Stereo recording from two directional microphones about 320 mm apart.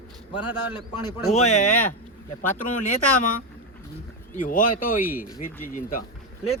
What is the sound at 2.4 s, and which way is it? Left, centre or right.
Speech, centre.